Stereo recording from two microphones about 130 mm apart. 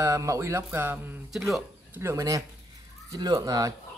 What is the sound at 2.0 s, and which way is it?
Speech, 25° right (ahead or behind).